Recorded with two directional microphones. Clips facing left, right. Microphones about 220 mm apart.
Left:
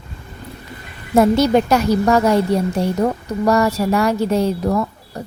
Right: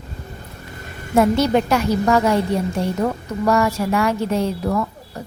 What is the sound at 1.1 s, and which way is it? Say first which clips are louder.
A woman's voice: left 3 dB; 40° left (ahead or behind).